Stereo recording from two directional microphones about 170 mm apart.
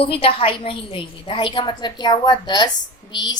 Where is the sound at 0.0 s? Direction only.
35° left (ahead or behind).